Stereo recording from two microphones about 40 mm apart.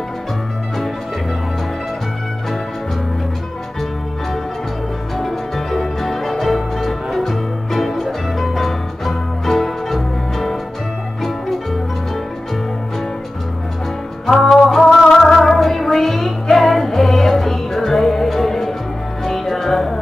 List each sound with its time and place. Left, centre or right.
5.1 s music: centre
14.4 s music: centre